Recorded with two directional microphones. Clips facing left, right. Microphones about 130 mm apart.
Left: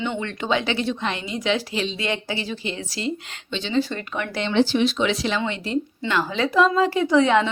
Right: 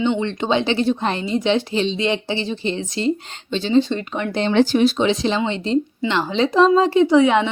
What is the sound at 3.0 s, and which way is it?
Speech, 35° right (ahead or behind).